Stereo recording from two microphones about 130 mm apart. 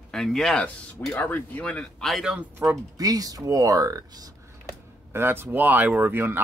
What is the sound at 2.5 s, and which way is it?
Speech, 25° right (ahead or behind).